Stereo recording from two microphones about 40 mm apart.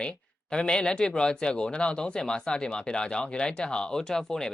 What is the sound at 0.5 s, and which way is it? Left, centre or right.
Speech, left.